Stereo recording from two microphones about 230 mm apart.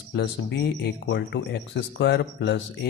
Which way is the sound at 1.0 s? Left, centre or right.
Left.